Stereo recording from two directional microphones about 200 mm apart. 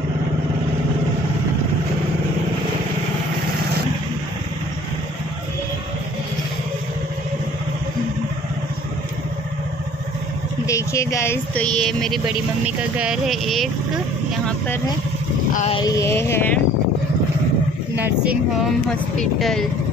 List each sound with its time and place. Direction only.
10.7 s speech: 15° left (ahead or behind); by 13.7 s centre (ahead or behind)
15.5 s speech: 30° left (ahead or behind)
15.8 s speech: 15° left (ahead or behind)
18.0 s speech: 5° right (ahead or behind)